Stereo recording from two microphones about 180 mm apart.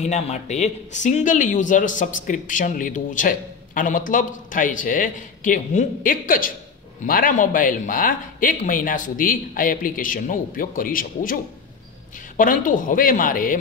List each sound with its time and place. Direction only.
0.0 s a man's voice: 40° left (ahead or behind)
12.4 s a man's voice: 50° left (ahead or behind)